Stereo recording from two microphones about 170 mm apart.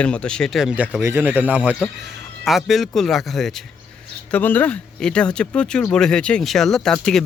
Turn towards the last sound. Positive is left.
turn(degrees=5)  # may be behind; listen again after turning